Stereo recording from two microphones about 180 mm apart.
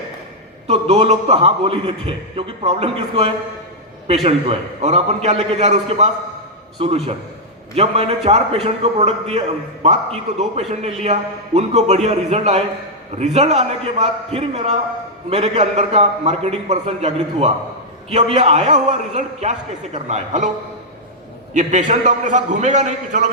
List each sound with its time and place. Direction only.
0.7 s a man's voice: 35° right (ahead or behind)
21.5 s a man's voice: 45° right (ahead or behind)